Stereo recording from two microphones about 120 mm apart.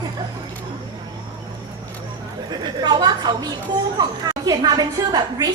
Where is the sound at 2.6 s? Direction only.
35° right (ahead or behind).